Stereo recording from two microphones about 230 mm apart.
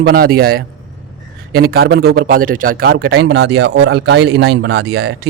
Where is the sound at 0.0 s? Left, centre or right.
Right.